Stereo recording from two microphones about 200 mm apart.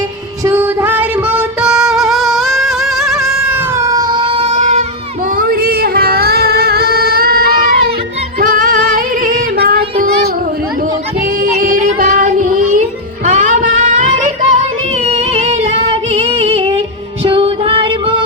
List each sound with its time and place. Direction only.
0.4 s music: 10° right (ahead or behind); by 4.9 s 35° right (ahead or behind)
5.4 s a sound: 45° right (ahead or behind)
8.4 s female singing: 45° right (ahead or behind)
11.6 s child singing: 45° right (ahead or behind)
13.2 s music: 40° right (ahead or behind)